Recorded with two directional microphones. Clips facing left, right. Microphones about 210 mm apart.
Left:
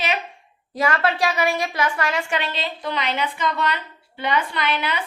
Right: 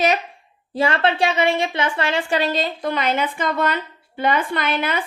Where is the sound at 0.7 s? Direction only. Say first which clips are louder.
Right 2 dB; 30° right (ahead or behind).